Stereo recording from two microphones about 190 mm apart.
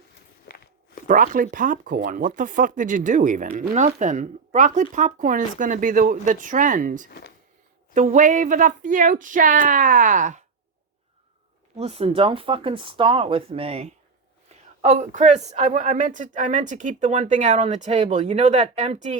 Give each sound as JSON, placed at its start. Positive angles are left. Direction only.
{"t": 0.5, "sound": "walk", "side_deg": 50}
{"t": 1.0, "sound": "speech", "side_deg": -45}
{"t": 7.1, "sound": "speech", "side_deg": 55}
{"t": 7.9, "sound": "speech", "side_deg": -40}
{"t": 11.8, "sound": "speech", "side_deg": -30}